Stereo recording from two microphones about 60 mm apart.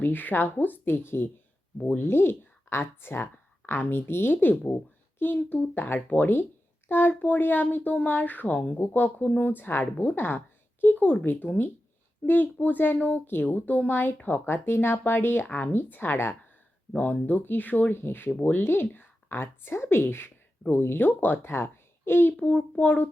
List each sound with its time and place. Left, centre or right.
0.0 s speech: left
10.0 s a sound: left
11.0 s a child's voice: left
11.3 s speech: left
17.0 s speech: left
22.4 s a child's voice: left